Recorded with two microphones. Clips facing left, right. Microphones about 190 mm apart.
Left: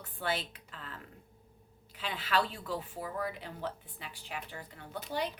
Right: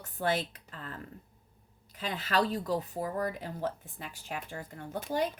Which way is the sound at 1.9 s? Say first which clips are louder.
Right 2 dB; 45° right (ahead or behind).